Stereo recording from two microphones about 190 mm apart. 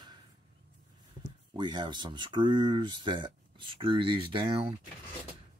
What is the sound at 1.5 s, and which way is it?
Speech, 25° right (ahead or behind).